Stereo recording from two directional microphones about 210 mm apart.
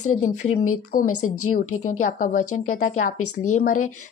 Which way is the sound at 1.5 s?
35° left (ahead or behind).